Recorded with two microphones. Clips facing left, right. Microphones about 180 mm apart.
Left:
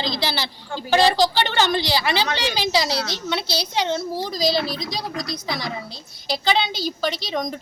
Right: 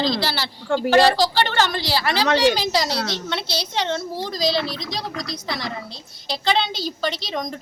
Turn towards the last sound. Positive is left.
turn(degrees=0)  # may be behind; listen again after turning